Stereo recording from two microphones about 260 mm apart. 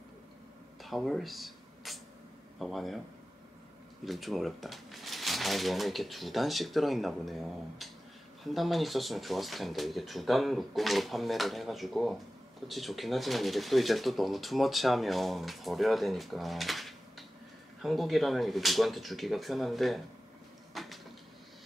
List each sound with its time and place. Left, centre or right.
0.8 s speech: centre
4.0 s speech: centre
20.7 s a sound: centre